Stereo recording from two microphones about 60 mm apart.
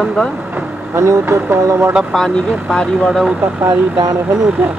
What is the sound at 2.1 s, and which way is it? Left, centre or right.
Speech, centre.